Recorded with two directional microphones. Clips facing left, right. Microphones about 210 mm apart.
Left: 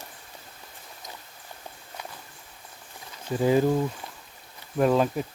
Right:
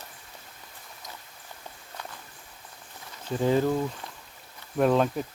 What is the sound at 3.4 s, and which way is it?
Speech, 10° left (ahead or behind).